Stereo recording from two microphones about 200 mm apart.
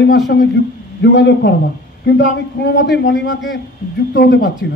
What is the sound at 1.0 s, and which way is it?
A man's voice, 60° left (ahead or behind).